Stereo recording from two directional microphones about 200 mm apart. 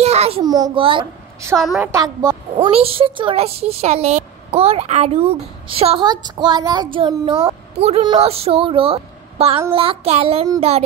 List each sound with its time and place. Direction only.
0.0 s a sound: 30° right (ahead or behind)
0.4 s speech: 20° right (ahead or behind)
1.6 s a woman's voice: centre (ahead or behind)
1.9 s a woman's voice: 20° right (ahead or behind)
2.5 s speech: 30° right (ahead or behind)